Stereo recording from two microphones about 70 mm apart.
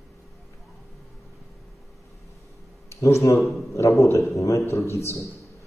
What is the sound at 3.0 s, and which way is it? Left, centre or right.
A man's voice, left.